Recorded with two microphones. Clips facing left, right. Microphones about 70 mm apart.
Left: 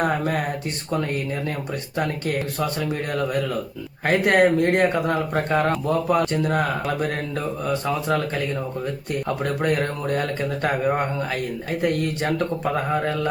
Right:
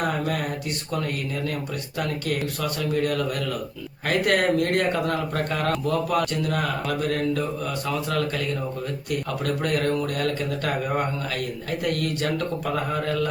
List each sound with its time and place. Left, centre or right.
0.0 s speech: left